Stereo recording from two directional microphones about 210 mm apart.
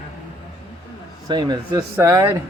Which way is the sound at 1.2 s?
20° right (ahead or behind).